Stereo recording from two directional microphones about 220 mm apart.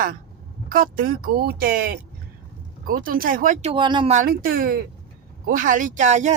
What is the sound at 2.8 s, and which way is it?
Speech, 40° right (ahead or behind).